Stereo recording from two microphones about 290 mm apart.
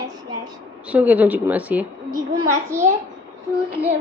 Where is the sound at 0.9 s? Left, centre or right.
Centre.